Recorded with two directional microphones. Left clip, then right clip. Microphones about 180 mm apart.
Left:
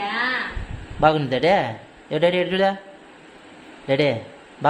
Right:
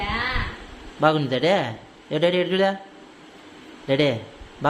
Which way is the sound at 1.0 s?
Centre (ahead or behind).